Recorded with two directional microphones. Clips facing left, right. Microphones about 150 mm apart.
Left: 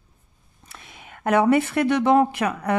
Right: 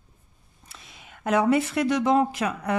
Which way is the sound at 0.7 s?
60° left (ahead or behind).